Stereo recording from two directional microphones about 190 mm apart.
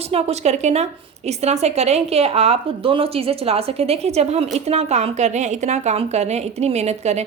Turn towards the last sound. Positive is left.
turn(degrees=-35)  # may be behind; listen again after turning